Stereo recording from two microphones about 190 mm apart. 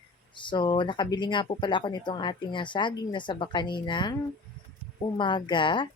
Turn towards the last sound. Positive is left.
turn(degrees=25)  # may be behind; listen again after turning